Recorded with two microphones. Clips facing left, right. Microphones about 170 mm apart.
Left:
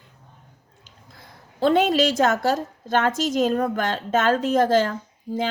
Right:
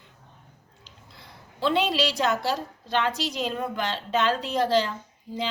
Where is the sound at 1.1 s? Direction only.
45° left (ahead or behind).